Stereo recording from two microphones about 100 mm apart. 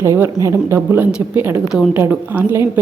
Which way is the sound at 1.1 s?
10° right (ahead or behind).